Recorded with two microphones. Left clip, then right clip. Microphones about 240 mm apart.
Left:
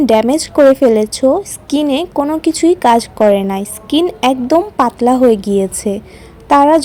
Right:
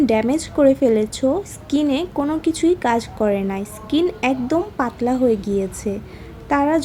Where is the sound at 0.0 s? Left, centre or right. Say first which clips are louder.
Left 7 dB; left.